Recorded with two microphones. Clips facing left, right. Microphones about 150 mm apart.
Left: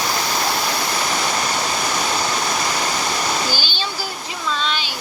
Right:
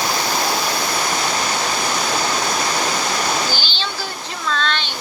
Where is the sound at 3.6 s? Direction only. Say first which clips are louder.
Even; 15° left (ahead or behind).